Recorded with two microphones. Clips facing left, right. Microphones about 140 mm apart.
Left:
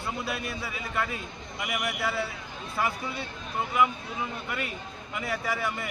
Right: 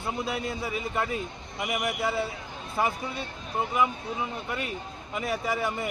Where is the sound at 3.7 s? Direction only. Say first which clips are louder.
Left 2 dB; 25° right (ahead or behind).